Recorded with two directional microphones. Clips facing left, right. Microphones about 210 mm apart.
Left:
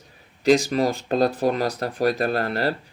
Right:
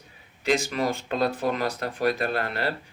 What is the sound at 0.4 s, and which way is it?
Speech, 35° left (ahead or behind).